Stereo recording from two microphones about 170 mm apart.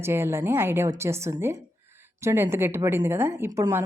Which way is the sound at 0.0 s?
15° right (ahead or behind).